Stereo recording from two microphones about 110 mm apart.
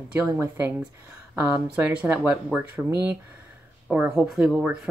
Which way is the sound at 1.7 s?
10° right (ahead or behind).